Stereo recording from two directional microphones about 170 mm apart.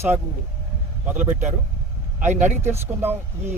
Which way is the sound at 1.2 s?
10° right (ahead or behind).